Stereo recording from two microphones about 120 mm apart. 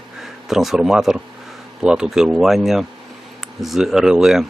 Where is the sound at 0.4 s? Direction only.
5° right (ahead or behind).